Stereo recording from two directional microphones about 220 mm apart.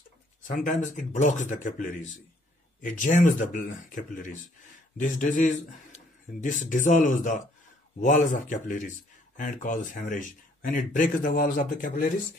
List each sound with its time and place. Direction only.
0.5 s speech: 35° left (ahead or behind)